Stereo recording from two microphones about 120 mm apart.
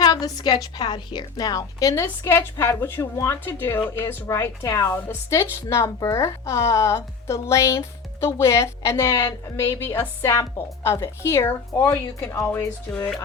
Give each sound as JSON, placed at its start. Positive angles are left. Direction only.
{"t": 0.0, "sound": "a woman's voice", "side_deg": 30}